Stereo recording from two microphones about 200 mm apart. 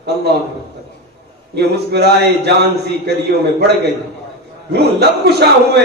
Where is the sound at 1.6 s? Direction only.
55° right (ahead or behind).